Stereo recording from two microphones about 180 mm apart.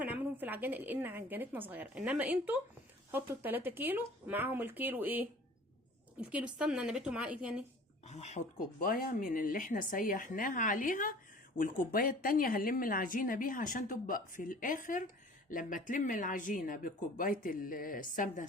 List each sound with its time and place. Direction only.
0.0 s a woman's voice: 10° right (ahead or behind)
8.0 s speech: 40° left (ahead or behind)
8.8 s a woman's voice: 50° left (ahead or behind)